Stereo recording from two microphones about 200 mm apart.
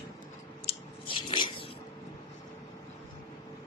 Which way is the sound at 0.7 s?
25° left (ahead or behind).